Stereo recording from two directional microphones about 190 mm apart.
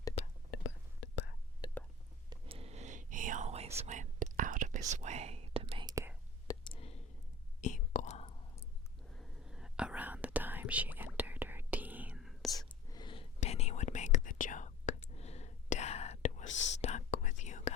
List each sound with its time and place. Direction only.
0.5 s whispering: 75° left (ahead or behind)
1.6 s whispering: 20° left (ahead or behind)
2.3 s whispering: 30° right (ahead or behind)
5.9 s whispering: 15° right (ahead or behind)
6.5 s clicking: 25° left (ahead or behind)
7.6 s whispering: 40° left (ahead or behind)
9.1 s whispering: centre (ahead or behind)
12.9 s a sound: 25° left (ahead or behind)
13.4 s whispering: 35° left (ahead or behind)
16.5 s whispering: 75° left (ahead or behind)
16.8 s whispering: 40° left (ahead or behind)